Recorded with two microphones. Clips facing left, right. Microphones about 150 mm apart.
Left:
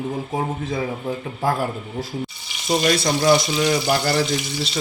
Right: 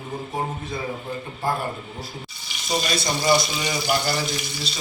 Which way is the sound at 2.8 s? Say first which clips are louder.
Left 8 dB; 70° left (ahead or behind).